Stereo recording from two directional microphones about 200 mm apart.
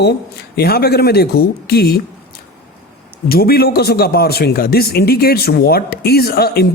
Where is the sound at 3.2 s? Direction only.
50° left (ahead or behind).